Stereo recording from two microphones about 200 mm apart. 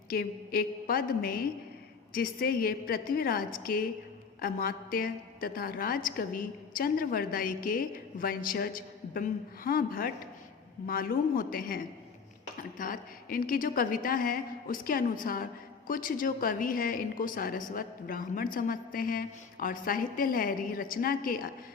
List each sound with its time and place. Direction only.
0.1 s a woman's voice: 50° left (ahead or behind)